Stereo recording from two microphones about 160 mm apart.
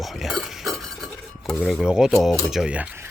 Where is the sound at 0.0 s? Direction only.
Centre (ahead or behind).